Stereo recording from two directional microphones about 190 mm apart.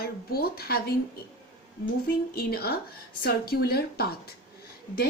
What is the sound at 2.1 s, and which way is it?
Speech, 55° left (ahead or behind).